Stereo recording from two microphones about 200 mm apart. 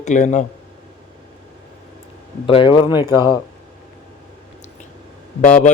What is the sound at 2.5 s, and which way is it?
Speech, 25° left (ahead or behind).